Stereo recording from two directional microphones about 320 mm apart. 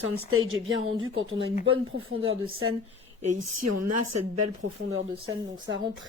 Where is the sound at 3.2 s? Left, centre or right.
Right.